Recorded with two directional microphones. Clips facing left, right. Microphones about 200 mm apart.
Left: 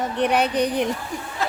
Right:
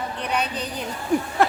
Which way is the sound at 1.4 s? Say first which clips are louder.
Right 6 dB; 60° right (ahead or behind).